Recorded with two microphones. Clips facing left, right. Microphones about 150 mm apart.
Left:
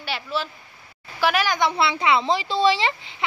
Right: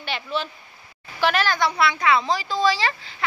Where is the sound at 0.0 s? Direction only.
5° left (ahead or behind).